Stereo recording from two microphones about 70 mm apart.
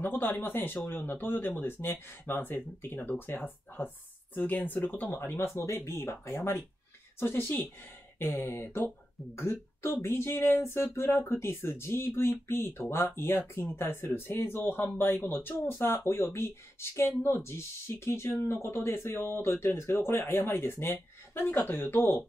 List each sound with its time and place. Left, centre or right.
0.0 s speech: left